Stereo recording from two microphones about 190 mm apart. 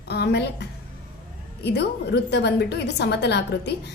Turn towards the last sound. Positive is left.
turn(degrees=65)  # may be behind; listen again after turning